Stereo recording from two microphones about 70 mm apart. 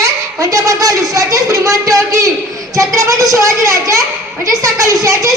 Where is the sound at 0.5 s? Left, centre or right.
Right.